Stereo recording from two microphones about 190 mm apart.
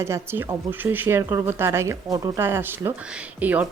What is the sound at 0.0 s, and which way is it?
Speech, 15° right (ahead or behind).